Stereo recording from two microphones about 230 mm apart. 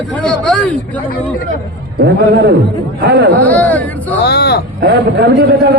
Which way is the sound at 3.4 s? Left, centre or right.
Centre.